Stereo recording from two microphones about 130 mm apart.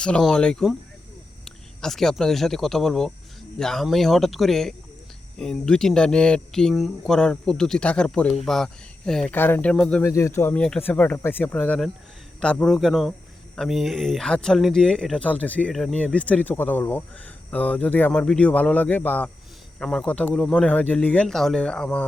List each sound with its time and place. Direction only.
0.0 s speech: 5° left (ahead or behind)
9.3 s speech: 15° left (ahead or behind)
10.0 s speech: 20° left (ahead or behind)
10.5 s speech: 10° left (ahead or behind)